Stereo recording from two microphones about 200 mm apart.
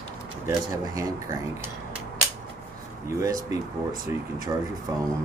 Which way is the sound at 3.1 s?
15° right (ahead or behind).